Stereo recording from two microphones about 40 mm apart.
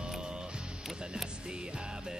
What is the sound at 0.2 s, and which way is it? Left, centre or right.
Music, centre.